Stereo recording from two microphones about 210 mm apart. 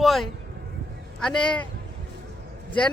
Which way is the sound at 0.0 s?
Centre (ahead or behind).